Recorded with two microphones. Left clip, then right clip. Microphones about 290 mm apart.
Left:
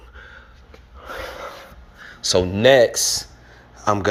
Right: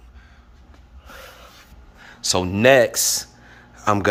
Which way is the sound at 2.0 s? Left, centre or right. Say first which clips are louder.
Left 3 dB; centre.